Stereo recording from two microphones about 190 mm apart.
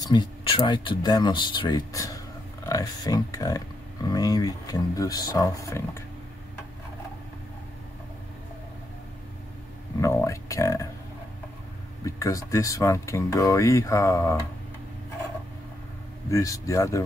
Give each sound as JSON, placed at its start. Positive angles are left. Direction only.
{"t": 0.0, "sound": "speech", "side_deg": 25}
{"t": 9.9, "sound": "speech", "side_deg": 15}
{"t": 12.0, "sound": "speech", "side_deg": 15}
{"t": 16.3, "sound": "speech", "side_deg": 15}